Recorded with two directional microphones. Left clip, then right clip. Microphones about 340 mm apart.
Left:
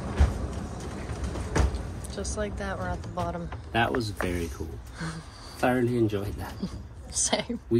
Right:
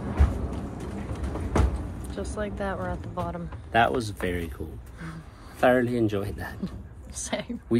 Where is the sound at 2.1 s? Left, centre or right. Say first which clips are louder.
Even; centre.